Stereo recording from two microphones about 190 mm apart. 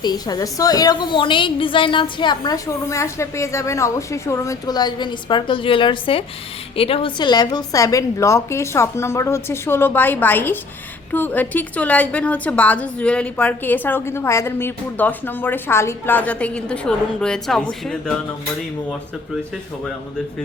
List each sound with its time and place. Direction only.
0.0 s a woman's voice: 20° left (ahead or behind); by 18.1 s 5° left (ahead or behind)